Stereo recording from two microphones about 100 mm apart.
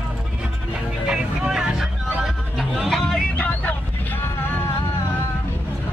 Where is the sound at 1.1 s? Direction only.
10° right (ahead or behind).